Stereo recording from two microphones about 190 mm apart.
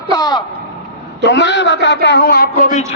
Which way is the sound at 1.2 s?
65° left (ahead or behind).